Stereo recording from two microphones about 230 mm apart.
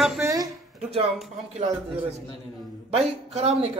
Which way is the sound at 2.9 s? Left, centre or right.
Right.